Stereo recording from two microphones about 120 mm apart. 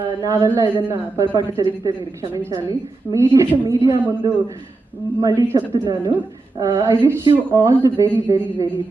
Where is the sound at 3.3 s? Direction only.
25° right (ahead or behind).